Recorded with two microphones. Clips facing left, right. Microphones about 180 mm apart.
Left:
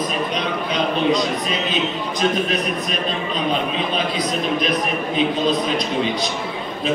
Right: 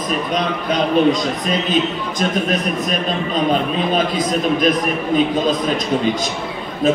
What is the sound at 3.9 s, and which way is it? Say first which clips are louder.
Speech: right 4 dB; 45° right (ahead or behind).